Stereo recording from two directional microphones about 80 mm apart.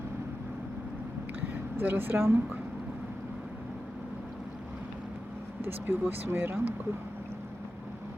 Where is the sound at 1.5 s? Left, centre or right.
Right.